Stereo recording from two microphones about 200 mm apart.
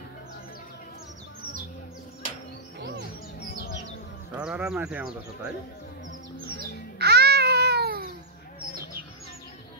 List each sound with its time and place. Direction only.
4.4 s speech: 5° right (ahead or behind)
7.0 s babbling: 55° right (ahead or behind)